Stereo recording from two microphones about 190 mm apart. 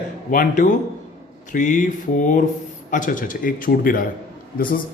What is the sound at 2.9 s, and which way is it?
Speech, 45° left (ahead or behind).